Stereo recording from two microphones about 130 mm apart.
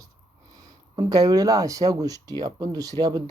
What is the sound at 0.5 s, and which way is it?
Speech, 30° right (ahead or behind).